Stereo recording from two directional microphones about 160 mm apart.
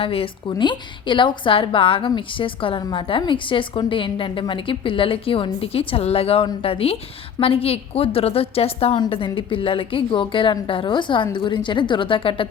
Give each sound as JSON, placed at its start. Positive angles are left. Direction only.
{"t": 0.0, "sound": "a woman's voice", "side_deg": 35}